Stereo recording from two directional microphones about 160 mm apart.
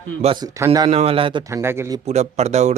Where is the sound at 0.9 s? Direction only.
40° right (ahead or behind).